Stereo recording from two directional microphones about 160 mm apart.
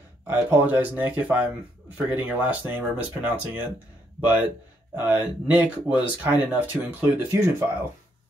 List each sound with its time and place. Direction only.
0.3 s speech: 10° right (ahead or behind)